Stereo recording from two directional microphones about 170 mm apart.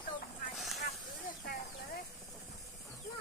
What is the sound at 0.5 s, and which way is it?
Vehicle, centre (ahead or behind).